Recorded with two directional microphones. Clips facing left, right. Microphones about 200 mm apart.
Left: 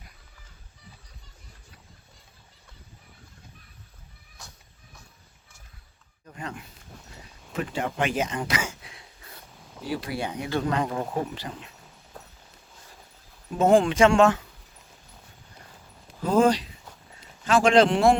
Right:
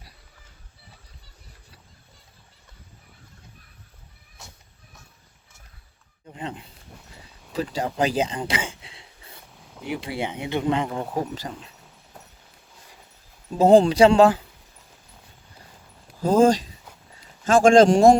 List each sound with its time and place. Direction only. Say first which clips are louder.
6.2 s speech: right 3 dB; 20° right (ahead or behind)
7.5 s a sound: right 3 dB; 35° right (ahead or behind)
9.4 s a sound: left 1 dB; centre (ahead or behind)
9.8 s speech: right 1 dB; 20° right (ahead or behind)
10.8 s speech: even; 5° right (ahead or behind)
13.6 s speech: right 4 dB; 35° right (ahead or behind)
16.2 s speech: right 3 dB; 40° right (ahead or behind)